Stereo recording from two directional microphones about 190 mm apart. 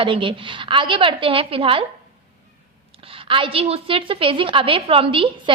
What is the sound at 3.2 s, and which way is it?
A woman's voice, 25° right (ahead or behind).